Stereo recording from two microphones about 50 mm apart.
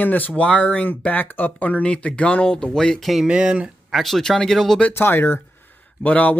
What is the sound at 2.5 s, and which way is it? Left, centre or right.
Speech, centre.